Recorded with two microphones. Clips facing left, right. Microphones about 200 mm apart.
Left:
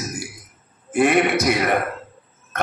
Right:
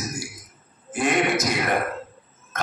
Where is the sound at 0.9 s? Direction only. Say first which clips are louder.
Left 5 dB; 60° left (ahead or behind).